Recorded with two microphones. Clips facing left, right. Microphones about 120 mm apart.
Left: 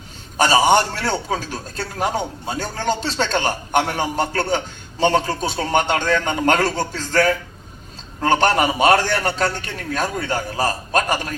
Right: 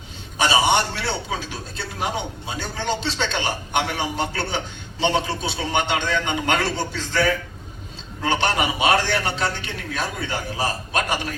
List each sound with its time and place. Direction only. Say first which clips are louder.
0.3 s a man's voice: left 4 dB; 45° left (ahead or behind)